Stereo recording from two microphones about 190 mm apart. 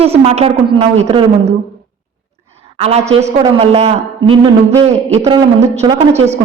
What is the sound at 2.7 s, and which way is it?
A woman's voice, 35° right (ahead or behind).